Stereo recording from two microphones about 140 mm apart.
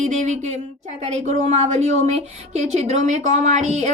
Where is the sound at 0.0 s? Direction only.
55° right (ahead or behind).